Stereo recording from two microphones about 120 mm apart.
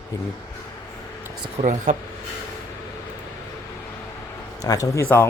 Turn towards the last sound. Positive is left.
turn(degrees=20)  # may be behind; listen again after turning